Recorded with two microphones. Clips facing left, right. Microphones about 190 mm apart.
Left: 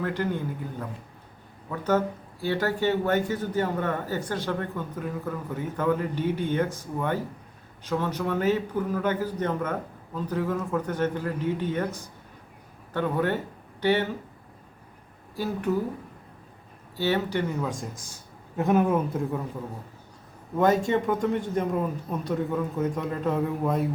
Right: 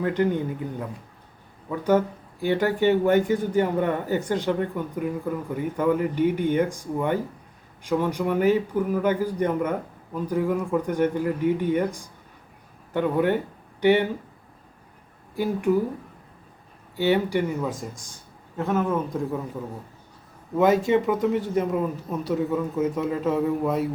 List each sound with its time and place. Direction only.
0.0 s speech: 20° right (ahead or behind)
15.4 s speech: 15° right (ahead or behind)
17.0 s speech: 15° right (ahead or behind)
18.5 s speech: 15° left (ahead or behind)
19.1 s speech: centre (ahead or behind)
20.9 s speech: 5° right (ahead or behind)